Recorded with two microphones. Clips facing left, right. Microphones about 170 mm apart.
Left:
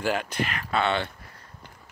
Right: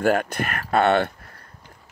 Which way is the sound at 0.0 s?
50° right (ahead or behind).